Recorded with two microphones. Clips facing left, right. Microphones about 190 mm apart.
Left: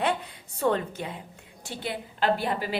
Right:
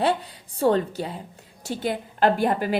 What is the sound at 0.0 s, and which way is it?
A woman's voice, 35° right (ahead or behind).